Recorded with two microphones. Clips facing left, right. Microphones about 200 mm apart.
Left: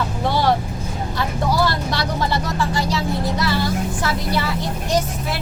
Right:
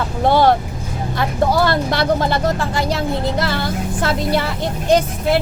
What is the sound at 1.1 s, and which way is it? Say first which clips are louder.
Speech: right 4 dB; 55° right (ahead or behind).